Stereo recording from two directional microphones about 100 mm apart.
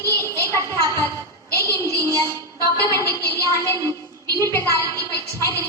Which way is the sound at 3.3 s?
30° left (ahead or behind).